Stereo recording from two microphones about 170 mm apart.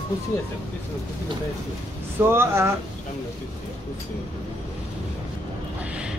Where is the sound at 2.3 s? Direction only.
15° right (ahead or behind).